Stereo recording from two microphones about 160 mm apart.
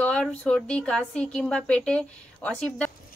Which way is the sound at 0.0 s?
5° left (ahead or behind).